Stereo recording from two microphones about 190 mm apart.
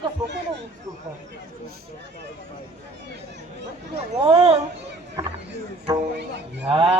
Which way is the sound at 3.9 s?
25° right (ahead or behind).